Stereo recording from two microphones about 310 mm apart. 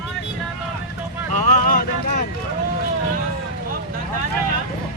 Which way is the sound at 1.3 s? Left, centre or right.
Left.